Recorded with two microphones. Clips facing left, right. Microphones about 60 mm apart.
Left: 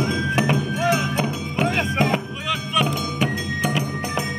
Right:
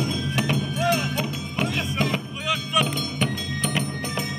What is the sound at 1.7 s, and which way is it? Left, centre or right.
Music, left.